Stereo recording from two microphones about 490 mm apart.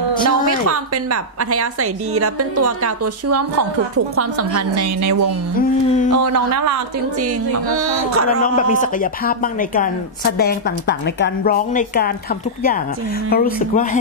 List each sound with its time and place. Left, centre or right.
0.1 s a sound: centre
0.7 s a woman's voice: right
5.6 s speech: centre
6.3 s a woman's voice: right
8.4 s speech: centre
13.3 s speech: centre